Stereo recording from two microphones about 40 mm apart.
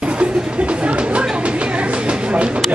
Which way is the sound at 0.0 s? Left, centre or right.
Right.